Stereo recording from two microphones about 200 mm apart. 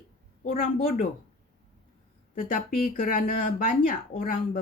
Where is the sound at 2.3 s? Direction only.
45° left (ahead or behind).